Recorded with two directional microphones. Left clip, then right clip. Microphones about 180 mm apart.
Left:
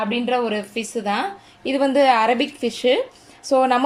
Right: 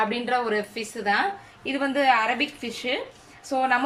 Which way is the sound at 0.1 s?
10° left (ahead or behind).